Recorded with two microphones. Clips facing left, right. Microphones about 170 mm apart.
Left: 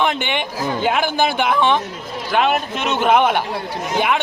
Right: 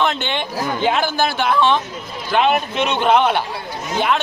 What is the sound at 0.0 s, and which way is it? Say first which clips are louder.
A man's voice: even; 15° left (ahead or behind).